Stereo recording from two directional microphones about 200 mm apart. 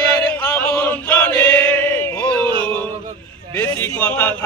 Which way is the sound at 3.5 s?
10° left (ahead or behind).